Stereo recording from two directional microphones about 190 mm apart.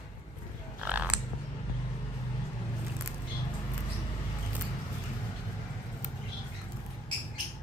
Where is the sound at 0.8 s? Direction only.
5° right (ahead or behind).